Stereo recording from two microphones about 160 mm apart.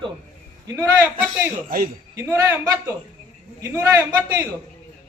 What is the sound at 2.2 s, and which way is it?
A man's voice, 15° right (ahead or behind).